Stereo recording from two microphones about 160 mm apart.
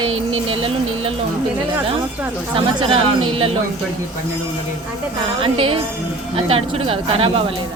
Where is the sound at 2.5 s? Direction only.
35° right (ahead or behind).